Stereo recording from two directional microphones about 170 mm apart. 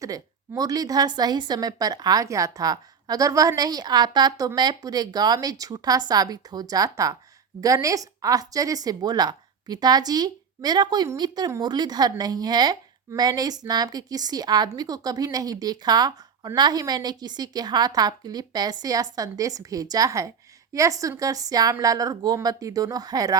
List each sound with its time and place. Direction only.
0.0 s a woman's voice: 20° right (ahead or behind)